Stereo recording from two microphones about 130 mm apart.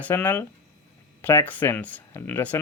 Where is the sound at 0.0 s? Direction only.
15° left (ahead or behind).